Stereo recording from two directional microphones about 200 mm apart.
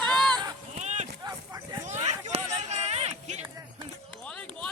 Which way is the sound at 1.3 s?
20° right (ahead or behind).